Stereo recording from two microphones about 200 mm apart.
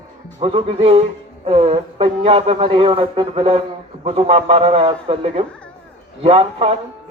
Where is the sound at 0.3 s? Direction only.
30° right (ahead or behind).